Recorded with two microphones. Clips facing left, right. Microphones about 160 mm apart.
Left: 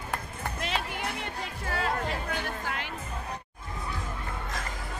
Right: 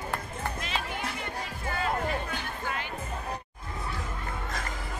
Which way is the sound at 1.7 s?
70° left (ahead or behind).